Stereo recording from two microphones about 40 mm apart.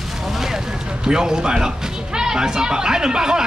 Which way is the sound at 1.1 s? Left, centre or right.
Centre.